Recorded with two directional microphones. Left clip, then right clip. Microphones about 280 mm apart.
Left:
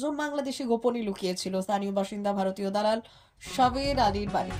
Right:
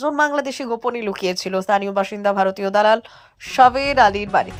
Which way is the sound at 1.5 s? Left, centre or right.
Right.